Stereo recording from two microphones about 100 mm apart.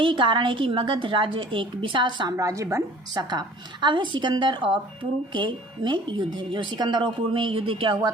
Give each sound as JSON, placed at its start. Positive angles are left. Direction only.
{"t": 0.0, "sound": "speech", "side_deg": -55}
{"t": 2.3, "sound": "a woman's voice", "side_deg": -35}
{"t": 3.2, "sound": "a woman's voice", "side_deg": -45}